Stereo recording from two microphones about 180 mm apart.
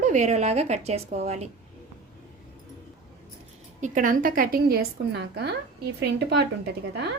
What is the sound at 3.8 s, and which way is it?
A woman's voice, 45° right (ahead or behind).